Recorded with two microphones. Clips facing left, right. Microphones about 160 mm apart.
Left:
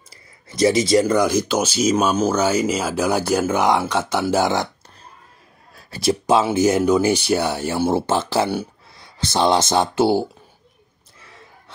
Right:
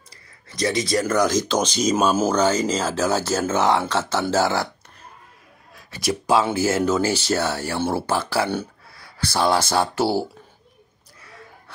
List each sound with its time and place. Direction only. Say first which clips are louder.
0.8 s speech: left 4 dB; 20° left (ahead or behind)
5.8 s a sound: left 5 dB; 30° left (ahead or behind)
6.5 s speech: left 4 dB; 20° left (ahead or behind)